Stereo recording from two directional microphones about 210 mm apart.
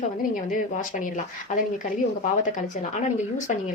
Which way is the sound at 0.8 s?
35° left (ahead or behind).